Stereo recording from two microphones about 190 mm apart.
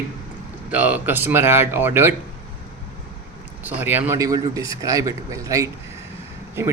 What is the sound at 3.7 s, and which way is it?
Speech, 10° right (ahead or behind).